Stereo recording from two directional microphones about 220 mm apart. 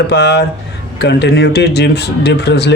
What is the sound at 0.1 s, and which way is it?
Speech, 50° left (ahead or behind).